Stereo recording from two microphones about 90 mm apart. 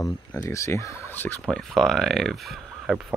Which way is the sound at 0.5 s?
35° left (ahead or behind).